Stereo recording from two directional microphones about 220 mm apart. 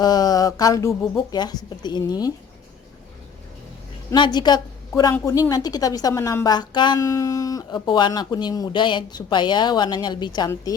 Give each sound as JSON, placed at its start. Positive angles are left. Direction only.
{"t": 0.0, "sound": "speech", "side_deg": 15}
{"t": 4.1, "sound": "a woman's voice", "side_deg": 20}